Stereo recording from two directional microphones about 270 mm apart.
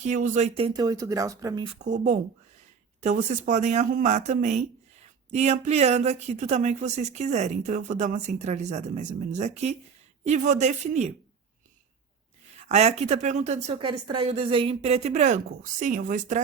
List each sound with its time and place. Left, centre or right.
0.0 s speech: right
12.6 s speech: right